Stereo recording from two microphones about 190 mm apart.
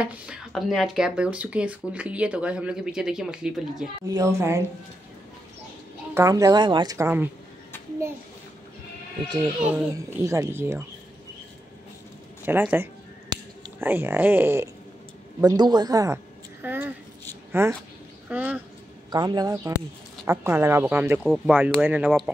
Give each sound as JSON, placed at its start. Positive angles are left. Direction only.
{"t": 0.0, "sound": "speech", "side_deg": -5}
{"t": 4.1, "sound": "a child's voice", "side_deg": -15}
{"t": 6.1, "sound": "a child's voice", "side_deg": -20}
{"t": 9.6, "sound": "a child's voice", "side_deg": -10}
{"t": 12.4, "sound": "finger snapping", "side_deg": -10}
{"t": 15.4, "sound": "speech", "side_deg": -20}
{"t": 16.6, "sound": "a sound", "side_deg": -10}
{"t": 17.5, "sound": "a child's voice", "side_deg": -15}
{"t": 19.0, "sound": "a child's voice", "side_deg": -20}